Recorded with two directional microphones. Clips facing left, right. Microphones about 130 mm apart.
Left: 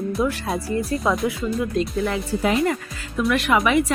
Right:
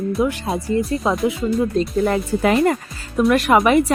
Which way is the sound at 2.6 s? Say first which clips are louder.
Right 4 dB; 45° right (ahead or behind).